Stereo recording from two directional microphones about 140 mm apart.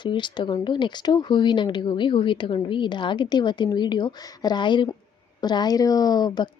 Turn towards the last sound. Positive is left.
turn(degrees=30)  # may be behind; listen again after turning